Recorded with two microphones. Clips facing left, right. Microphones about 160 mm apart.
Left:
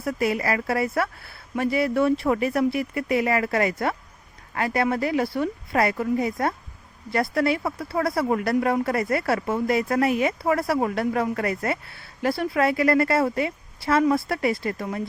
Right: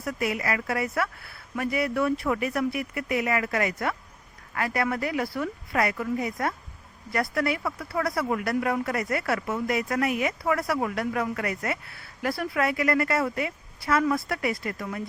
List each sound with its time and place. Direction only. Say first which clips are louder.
0.0 s speech: left 4 dB; 30° left (ahead or behind)